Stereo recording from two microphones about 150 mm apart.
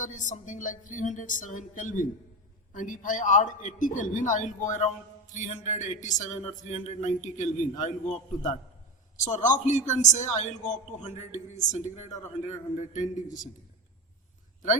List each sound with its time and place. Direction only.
0.0 s a man's voice: 55° left (ahead or behind)